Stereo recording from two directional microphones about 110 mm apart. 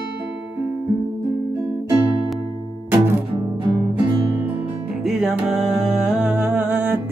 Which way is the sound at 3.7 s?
50° right (ahead or behind).